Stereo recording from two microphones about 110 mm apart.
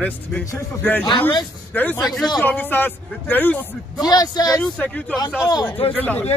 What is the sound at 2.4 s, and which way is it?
Speech, 15° left (ahead or behind).